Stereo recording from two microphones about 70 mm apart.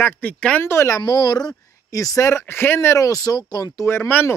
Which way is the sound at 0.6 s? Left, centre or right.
Left.